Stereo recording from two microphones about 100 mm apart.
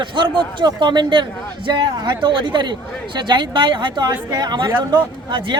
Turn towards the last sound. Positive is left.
turn(degrees=-55)  # may be behind; listen again after turning